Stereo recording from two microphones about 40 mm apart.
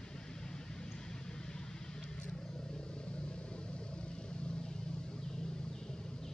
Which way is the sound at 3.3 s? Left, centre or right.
Left.